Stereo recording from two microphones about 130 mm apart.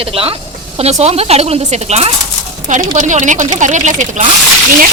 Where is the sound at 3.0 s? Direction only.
70° right (ahead or behind).